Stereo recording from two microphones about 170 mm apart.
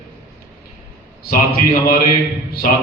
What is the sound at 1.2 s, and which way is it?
Speech, 65° left (ahead or behind).